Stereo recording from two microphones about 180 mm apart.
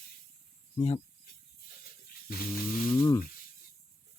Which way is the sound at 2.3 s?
55° left (ahead or behind).